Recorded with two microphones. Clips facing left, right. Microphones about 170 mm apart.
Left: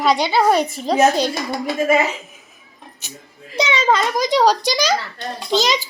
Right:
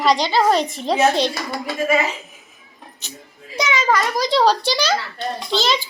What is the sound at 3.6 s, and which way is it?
A child's voice, 30° left (ahead or behind).